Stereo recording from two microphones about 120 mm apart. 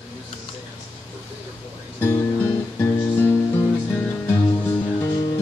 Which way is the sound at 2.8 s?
20° left (ahead or behind).